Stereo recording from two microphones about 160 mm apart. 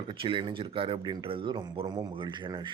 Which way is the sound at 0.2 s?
35° right (ahead or behind).